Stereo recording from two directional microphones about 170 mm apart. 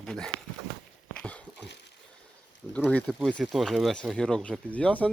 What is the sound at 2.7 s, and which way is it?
Speech, 10° left (ahead or behind).